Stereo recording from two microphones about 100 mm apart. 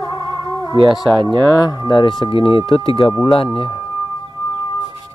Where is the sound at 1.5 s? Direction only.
40° left (ahead or behind); by 3.8 s 60° left (ahead or behind).